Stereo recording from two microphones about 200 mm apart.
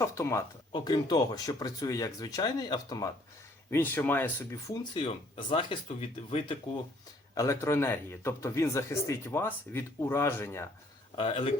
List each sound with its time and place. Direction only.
0.0 s speech: 15° left (ahead or behind)
4.7 s speech: 25° left (ahead or behind)
7.3 s speech: 15° left (ahead or behind)
11.1 s speech: 25° left (ahead or behind)